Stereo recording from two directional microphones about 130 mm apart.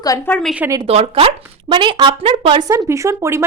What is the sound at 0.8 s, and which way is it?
Speech, 50° right (ahead or behind).